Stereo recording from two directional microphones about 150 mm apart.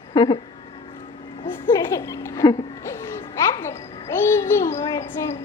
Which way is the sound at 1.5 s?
20° left (ahead or behind).